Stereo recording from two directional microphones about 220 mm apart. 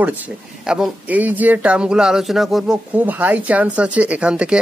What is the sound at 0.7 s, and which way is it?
Speech, centre (ahead or behind).